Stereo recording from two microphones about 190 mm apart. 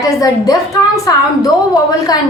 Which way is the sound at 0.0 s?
20° left (ahead or behind).